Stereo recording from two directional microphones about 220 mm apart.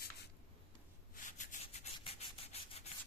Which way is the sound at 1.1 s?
35° left (ahead or behind).